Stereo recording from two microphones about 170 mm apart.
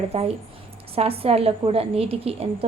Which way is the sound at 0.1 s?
35° right (ahead or behind).